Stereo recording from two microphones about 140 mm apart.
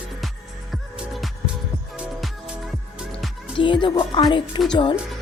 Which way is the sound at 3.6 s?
35° left (ahead or behind).